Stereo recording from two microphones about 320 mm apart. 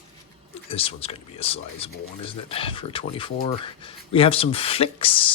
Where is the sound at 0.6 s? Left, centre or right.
Centre.